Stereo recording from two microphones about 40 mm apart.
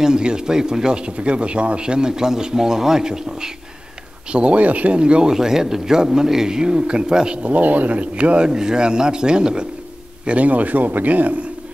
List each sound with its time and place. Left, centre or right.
0.0 s speech: right
4.3 s speech: right
7.4 s speech: right
8.5 s speech: centre
10.2 s speech: right